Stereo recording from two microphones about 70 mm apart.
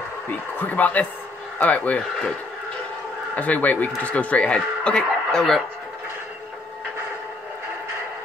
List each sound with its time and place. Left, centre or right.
0.3 s speech: left
3.3 s speech: left